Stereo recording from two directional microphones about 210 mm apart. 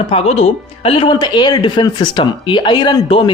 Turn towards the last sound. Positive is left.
turn(degrees=25)  # may be behind; listen again after turning